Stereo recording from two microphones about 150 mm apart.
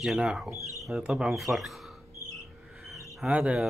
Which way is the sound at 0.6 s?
20° left (ahead or behind).